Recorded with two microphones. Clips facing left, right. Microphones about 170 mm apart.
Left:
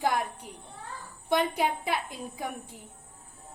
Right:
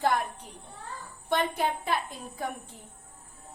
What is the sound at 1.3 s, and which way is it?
A woman's voice, 10° left (ahead or behind).